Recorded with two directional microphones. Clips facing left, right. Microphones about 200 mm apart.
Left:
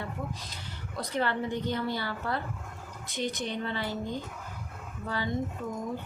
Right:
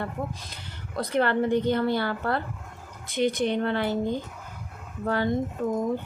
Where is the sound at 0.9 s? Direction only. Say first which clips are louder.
Right 7 dB; 60° right (ahead or behind).